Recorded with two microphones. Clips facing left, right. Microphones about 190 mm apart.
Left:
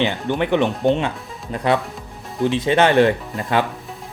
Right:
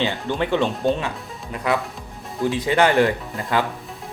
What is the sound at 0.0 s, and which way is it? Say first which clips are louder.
Speech: left 3 dB; 20° left (ahead or behind).